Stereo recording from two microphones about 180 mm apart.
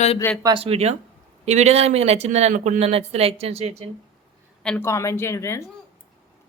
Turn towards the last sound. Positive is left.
turn(degrees=15)  # may be behind; listen again after turning